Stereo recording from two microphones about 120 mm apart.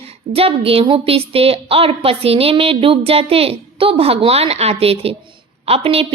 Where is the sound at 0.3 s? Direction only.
50° right (ahead or behind).